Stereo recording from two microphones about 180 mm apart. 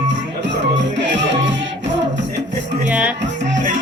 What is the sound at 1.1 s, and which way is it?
Music, 85° right.